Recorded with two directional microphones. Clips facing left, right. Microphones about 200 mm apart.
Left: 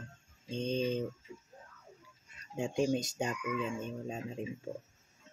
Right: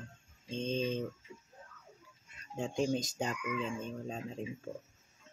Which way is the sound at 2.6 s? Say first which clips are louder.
Left 2 dB; 10° left (ahead or behind).